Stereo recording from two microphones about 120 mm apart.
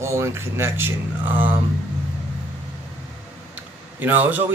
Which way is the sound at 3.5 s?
15° right (ahead or behind).